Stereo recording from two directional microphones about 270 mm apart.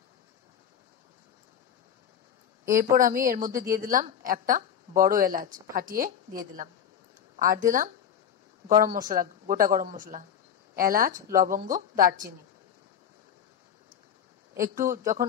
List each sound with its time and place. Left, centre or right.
2.8 s a woman's voice: right
14.8 s speech: right